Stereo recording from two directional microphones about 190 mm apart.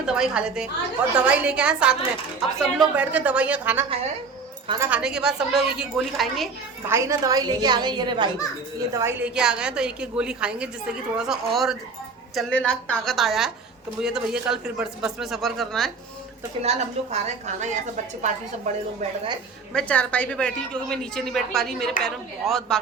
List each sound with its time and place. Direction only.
0.0 s a woman's voice: 5° right (ahead or behind)
6.8 s a woman's voice: 15° right (ahead or behind); by 15.9 s centre (ahead or behind)
16.6 s a woman's voice: 35° right (ahead or behind)
19.7 s a woman's voice: 5° left (ahead or behind)